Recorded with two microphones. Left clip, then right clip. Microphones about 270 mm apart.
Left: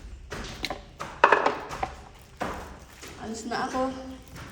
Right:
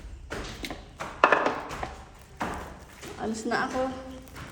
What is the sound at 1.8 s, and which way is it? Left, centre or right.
Music, left.